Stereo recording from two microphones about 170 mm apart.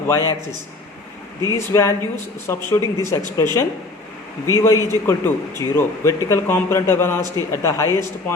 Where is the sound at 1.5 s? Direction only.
15° left (ahead or behind).